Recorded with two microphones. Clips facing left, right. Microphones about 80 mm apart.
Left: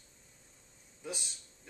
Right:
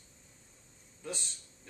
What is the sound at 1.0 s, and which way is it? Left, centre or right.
Speech, centre.